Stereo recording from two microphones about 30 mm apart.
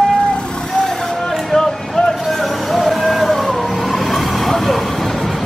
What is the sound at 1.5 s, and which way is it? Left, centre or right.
Vehicle, centre.